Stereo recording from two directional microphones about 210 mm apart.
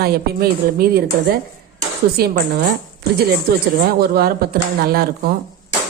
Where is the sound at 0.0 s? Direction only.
45° right (ahead or behind).